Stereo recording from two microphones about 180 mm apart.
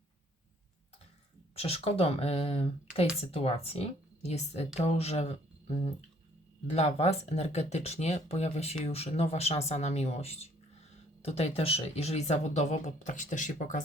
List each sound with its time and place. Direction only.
1.5 s speech: 35° left (ahead or behind)